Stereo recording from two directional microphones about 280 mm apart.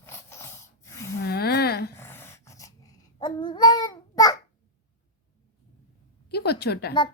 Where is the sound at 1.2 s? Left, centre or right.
Left.